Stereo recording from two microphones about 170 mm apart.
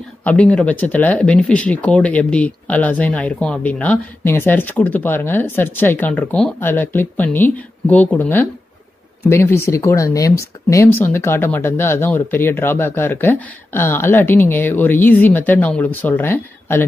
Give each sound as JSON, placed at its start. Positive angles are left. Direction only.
{"t": 0.2, "sound": "speech", "side_deg": 10}